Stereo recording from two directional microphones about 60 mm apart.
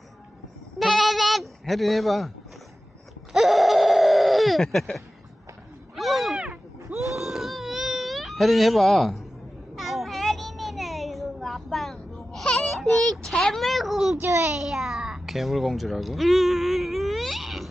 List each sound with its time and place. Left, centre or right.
0.8 s bleat: centre
3.3 s a sound: centre
4.6 s speech: centre
6.0 s cat: centre
7.1 s baby cry: centre
9.7 s a sound: centre
12.7 s a child's voice: centre
14.2 s a child's voice: right
14.5 s speech: centre